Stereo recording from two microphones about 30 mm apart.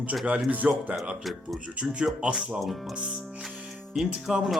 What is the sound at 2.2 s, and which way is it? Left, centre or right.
Speech, right.